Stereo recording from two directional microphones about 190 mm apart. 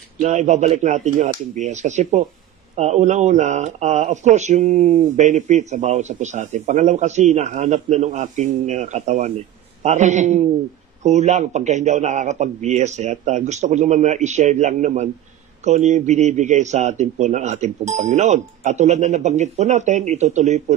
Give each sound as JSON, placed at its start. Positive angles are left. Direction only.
{"t": 0.2, "sound": "speech", "side_deg": -40}